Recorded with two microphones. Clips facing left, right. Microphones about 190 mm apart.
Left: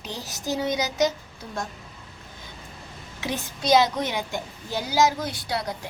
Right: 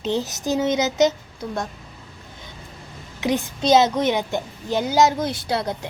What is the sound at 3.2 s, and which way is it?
A woman's voice, 20° right (ahead or behind).